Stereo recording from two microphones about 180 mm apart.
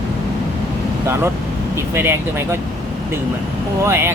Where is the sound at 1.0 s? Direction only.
15° right (ahead or behind).